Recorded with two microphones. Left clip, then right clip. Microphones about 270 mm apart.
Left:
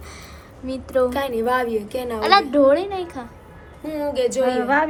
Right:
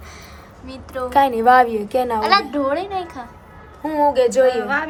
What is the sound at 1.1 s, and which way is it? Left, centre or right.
A woman's voice, right.